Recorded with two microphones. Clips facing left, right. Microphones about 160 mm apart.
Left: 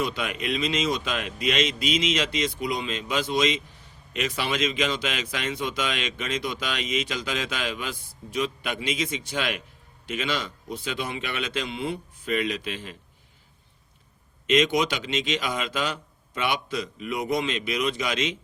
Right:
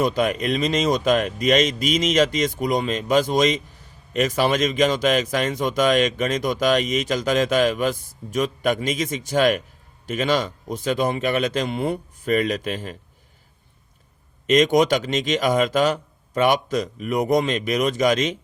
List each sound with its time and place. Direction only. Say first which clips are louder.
0.0 s speech: right 8 dB; 40° right (ahead or behind)
14.4 s speech: right 6 dB; 45° right (ahead or behind)